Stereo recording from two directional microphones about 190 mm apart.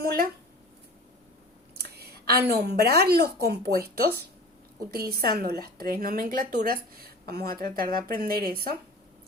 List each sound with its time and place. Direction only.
0.0 s a woman's voice: 50° right (ahead or behind)
1.8 s a sound: 55° right (ahead or behind)
2.6 s a woman's voice: 55° right (ahead or behind)